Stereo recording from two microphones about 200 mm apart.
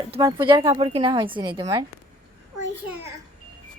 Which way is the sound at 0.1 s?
20° right (ahead or behind).